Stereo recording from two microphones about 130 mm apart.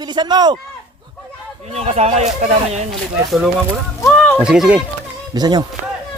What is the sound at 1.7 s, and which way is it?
Speech, 55° right (ahead or behind).